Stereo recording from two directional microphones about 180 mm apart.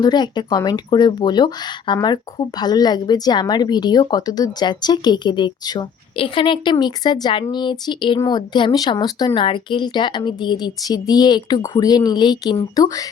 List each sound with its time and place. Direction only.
0.0 s a woman's voice: 25° left (ahead or behind)